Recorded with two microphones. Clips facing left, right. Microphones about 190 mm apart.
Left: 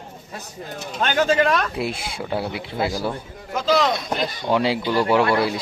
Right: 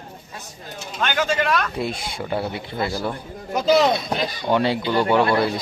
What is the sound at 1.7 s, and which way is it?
Speech, 5° left (ahead or behind).